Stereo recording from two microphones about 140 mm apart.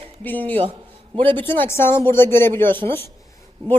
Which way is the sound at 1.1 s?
40° right (ahead or behind).